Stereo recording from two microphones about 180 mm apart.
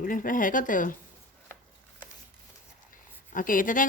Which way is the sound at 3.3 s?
50° left (ahead or behind).